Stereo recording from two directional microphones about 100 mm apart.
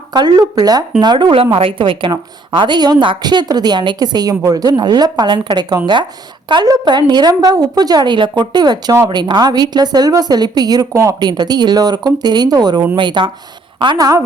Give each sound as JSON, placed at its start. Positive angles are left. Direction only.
{"t": 0.1, "sound": "a woman's voice", "side_deg": -45}
{"t": 11.2, "sound": "a woman's voice", "side_deg": -45}